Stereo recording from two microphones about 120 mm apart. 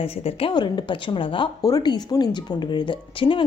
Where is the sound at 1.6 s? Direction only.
30° left (ahead or behind).